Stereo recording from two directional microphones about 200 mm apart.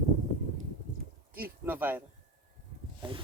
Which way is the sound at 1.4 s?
10° right (ahead or behind).